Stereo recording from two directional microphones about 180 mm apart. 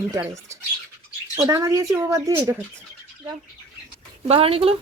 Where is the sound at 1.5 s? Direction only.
15° right (ahead or behind).